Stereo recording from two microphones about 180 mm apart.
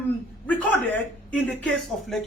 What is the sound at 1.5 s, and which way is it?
Speech, centre (ahead or behind).